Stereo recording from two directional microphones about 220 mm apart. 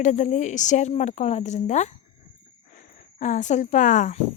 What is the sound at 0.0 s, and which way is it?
Speech, 35° left (ahead or behind).